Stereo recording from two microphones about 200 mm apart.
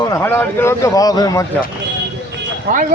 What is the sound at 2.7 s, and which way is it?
Speech, 40° right (ahead or behind).